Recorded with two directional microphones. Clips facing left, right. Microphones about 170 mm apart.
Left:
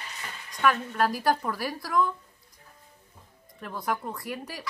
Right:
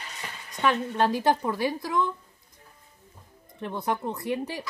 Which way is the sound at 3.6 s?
25° right (ahead or behind).